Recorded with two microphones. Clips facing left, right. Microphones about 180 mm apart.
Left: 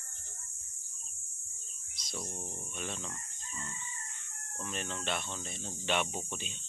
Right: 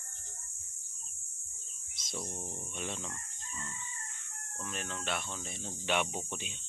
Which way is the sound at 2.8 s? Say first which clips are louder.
Right 1 dB; 15° right (ahead or behind).